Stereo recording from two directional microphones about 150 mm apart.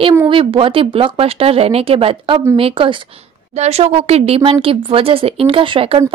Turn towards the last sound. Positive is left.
turn(degrees=-35)  # may be behind; listen again after turning